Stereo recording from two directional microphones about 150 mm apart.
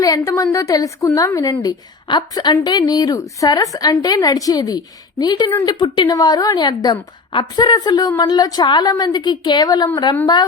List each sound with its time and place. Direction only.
0.0 s a woman's voice: 20° left (ahead or behind)